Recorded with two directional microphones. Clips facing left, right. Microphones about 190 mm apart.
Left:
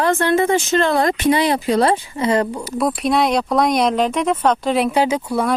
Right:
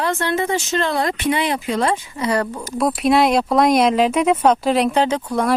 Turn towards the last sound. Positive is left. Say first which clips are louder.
# left 1 dB
turn(degrees=5)  # may be behind; listen again after turning